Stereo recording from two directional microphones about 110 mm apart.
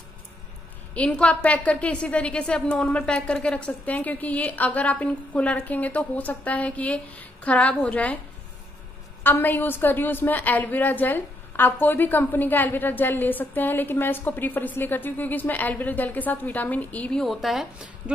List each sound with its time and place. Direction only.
0.9 s a woman's voice: 10° left (ahead or behind)
9.2 s a woman's voice: 20° left (ahead or behind); by 18.1 s 5° right (ahead or behind)